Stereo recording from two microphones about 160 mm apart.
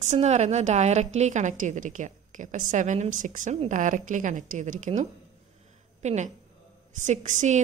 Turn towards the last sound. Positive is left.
turn(degrees=-50)  # may be behind; listen again after turning